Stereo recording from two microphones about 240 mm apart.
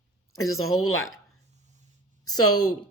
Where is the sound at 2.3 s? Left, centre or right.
Left.